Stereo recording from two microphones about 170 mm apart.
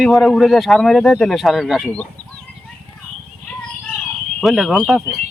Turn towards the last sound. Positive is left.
turn(degrees=0)  # may be behind; listen again after turning